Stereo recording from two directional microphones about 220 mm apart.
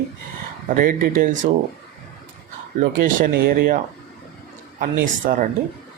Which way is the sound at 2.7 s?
35° right (ahead or behind).